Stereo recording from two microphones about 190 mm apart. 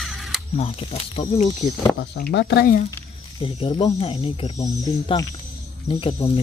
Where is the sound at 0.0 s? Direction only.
Centre (ahead or behind).